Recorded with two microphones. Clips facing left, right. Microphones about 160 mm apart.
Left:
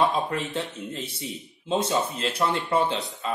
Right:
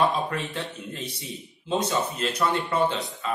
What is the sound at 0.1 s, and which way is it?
Speech, 25° left (ahead or behind).